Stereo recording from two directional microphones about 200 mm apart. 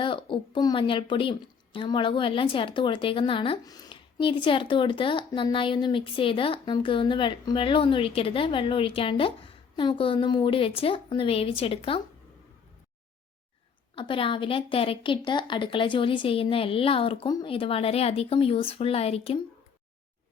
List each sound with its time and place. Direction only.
0.0 s a woman's voice: 25° left (ahead or behind)
13.9 s a woman's voice: 25° left (ahead or behind)